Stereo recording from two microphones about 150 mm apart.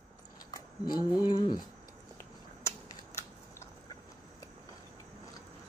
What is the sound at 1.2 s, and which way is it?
Speech, 25° left (ahead or behind).